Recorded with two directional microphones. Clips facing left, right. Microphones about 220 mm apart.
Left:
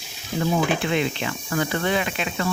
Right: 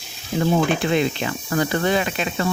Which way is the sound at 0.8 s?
40° right (ahead or behind).